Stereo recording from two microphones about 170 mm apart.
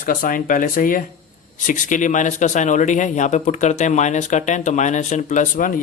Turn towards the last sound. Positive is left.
turn(degrees=50)  # may be behind; listen again after turning